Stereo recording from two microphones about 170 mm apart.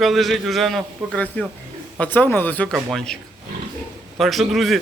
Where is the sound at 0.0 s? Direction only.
Centre (ahead or behind).